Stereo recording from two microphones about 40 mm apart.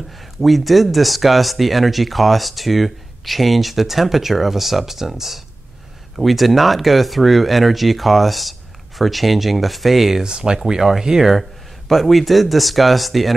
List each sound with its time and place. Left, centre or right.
0.1 s speech: centre
10.2 s speech: centre
11.9 s speech: centre